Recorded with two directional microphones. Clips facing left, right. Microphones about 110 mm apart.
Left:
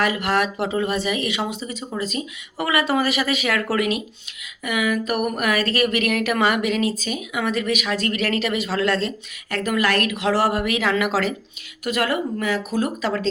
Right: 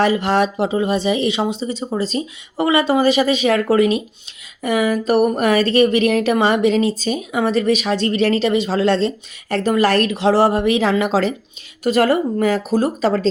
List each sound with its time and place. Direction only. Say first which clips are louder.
0.0 s speech: right 5 dB; 30° right (ahead or behind)